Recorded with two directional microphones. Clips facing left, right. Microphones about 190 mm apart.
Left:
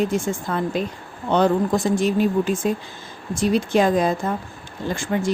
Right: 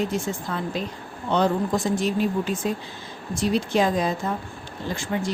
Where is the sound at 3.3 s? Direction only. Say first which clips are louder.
Left 3 dB; 50° left (ahead or behind).